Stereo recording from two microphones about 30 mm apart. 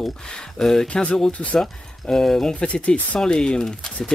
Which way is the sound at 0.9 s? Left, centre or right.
Left.